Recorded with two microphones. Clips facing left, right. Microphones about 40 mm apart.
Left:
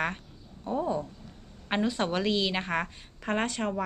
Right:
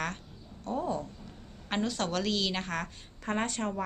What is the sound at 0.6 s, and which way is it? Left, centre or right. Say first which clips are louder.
A woman's voice: left 3 dB; centre.